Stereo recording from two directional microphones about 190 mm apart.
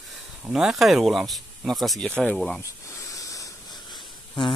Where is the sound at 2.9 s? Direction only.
15° left (ahead or behind).